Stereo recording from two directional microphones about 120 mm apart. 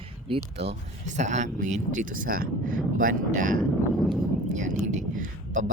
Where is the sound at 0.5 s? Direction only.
70° right (ahead or behind); by 2.1 s 90° right.